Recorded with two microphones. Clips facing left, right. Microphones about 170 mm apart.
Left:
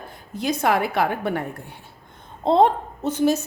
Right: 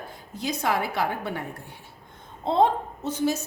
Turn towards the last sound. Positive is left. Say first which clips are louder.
# left 5 dB
turn(degrees=60)  # may be behind; listen again after turning